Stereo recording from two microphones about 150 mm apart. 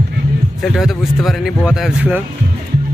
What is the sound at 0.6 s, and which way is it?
Speech, centre (ahead or behind).